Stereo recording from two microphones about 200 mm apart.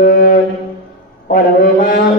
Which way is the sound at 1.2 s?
45° left (ahead or behind).